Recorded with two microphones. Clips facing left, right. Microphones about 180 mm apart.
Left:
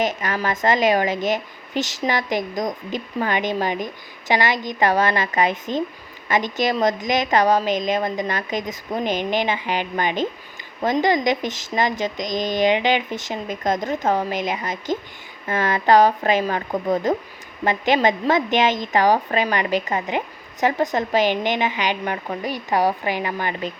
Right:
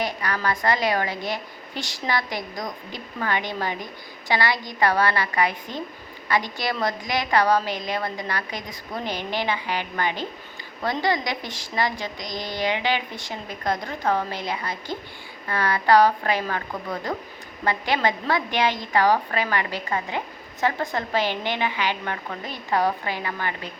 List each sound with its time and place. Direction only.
0.0 s a woman's voice: 20° left (ahead or behind)